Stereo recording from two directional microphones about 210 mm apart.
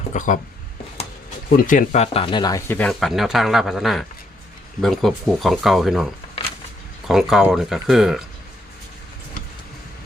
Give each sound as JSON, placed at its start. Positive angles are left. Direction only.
{"t": 0.1, "sound": "speech", "side_deg": 40}
{"t": 1.6, "sound": "speech", "side_deg": 35}
{"t": 7.1, "sound": "speech", "side_deg": 0}